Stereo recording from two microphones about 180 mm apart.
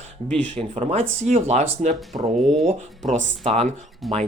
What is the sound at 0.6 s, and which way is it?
Speech, 35° right (ahead or behind).